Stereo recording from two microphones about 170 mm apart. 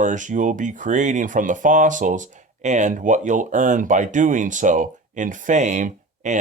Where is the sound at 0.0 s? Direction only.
45° right (ahead or behind).